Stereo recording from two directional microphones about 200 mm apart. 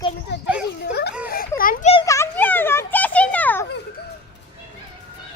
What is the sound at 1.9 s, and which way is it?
Children playing, 20° left (ahead or behind).